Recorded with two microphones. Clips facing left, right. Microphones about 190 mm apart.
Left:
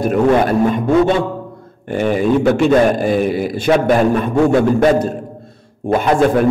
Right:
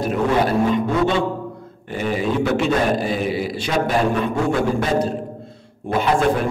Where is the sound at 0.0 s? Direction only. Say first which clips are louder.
Left 6 dB; 50° left (ahead or behind).